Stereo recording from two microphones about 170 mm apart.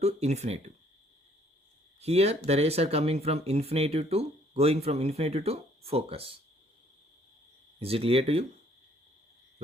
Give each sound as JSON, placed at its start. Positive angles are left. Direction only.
{"t": 0.0, "sound": "speech", "side_deg": -40}
{"t": 2.0, "sound": "speech", "side_deg": -40}
{"t": 7.8, "sound": "speech", "side_deg": -35}